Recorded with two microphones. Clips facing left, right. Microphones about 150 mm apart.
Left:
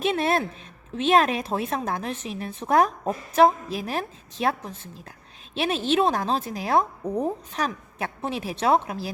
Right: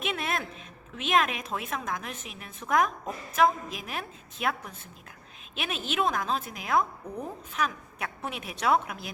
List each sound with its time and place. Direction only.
0.0 s a woman's voice: 35° left (ahead or behind)